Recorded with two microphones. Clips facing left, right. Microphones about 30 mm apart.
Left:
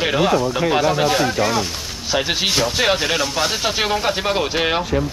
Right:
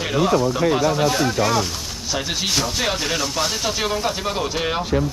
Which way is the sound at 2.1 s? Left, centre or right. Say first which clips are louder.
Left 4 dB; left.